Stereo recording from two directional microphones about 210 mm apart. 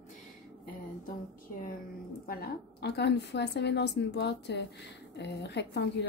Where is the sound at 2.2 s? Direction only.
45° left (ahead or behind).